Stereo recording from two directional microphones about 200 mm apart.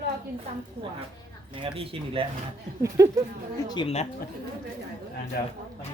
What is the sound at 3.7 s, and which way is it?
Speech, 25° left (ahead or behind).